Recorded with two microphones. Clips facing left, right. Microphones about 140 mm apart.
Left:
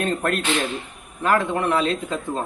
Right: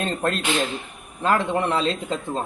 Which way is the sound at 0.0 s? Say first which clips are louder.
Left 1 dB; 25° right (ahead or behind).